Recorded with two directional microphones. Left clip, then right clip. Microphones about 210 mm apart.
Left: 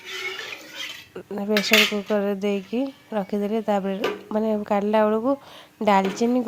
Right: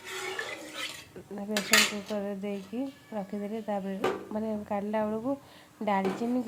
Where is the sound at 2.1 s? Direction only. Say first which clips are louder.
Left 11 dB; 30° left (ahead or behind).